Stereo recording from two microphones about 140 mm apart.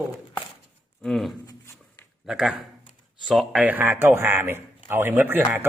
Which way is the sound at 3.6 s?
15° right (ahead or behind).